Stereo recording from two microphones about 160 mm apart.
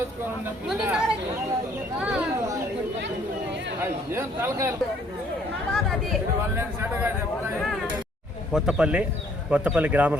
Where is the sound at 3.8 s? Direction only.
15° right (ahead or behind).